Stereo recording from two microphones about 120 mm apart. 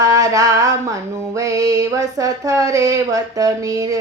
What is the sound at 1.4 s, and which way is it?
Child singing, 30° right (ahead or behind).